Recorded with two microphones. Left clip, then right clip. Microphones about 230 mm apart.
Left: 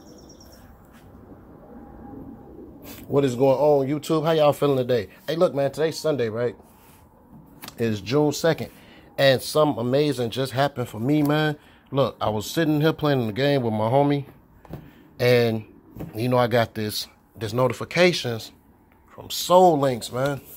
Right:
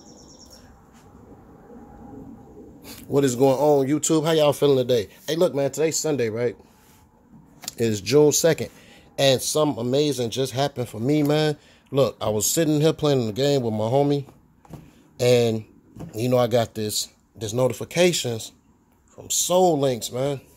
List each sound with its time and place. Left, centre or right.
2.8 s speech: centre; by 6.5 s right
7.6 s speech: right
9.2 s speech: centre
19.1 s speech: centre